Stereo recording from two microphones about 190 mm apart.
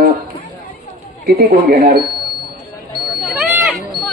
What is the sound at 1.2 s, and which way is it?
Speech, 50° right (ahead or behind).